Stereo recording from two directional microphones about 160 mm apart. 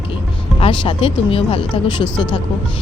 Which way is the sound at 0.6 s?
30° left (ahead or behind).